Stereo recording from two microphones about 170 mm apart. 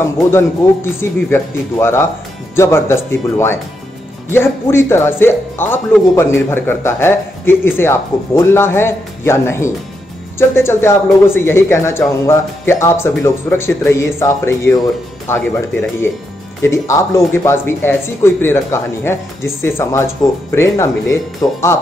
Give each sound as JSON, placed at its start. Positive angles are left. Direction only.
{"t": 0.0, "sound": "speech", "side_deg": 15}